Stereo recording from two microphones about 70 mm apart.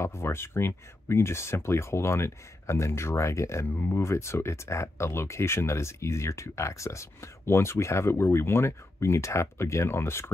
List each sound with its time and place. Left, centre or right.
0.0 s speech: left